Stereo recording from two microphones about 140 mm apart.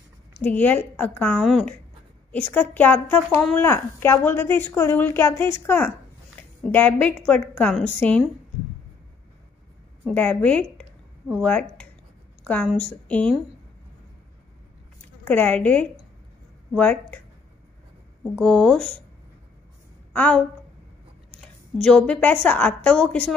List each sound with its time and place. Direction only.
0.4 s speech: 10° left (ahead or behind)
1.4 s speech: centre (ahead or behind)
2.3 s speech: 10° left (ahead or behind)
10.1 s speech: 10° left (ahead or behind)
15.2 s speech: 10° left (ahead or behind)
18.4 s speech: 5° left (ahead or behind)
20.1 s a woman's voice: 10° left (ahead or behind)